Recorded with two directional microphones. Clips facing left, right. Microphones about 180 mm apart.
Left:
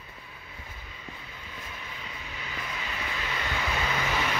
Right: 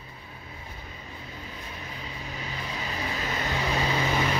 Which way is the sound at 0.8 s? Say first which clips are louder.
Right 3 dB; 35° right (ahead or behind).